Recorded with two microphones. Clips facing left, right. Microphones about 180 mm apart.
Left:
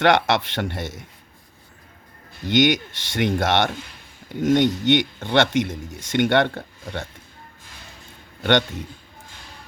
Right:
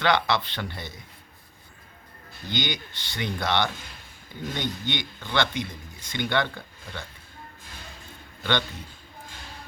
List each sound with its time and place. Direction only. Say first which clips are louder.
0.0 s speech: left 6 dB; 75° left (ahead or behind)
2.5 s speech: left 12 dB; 80° left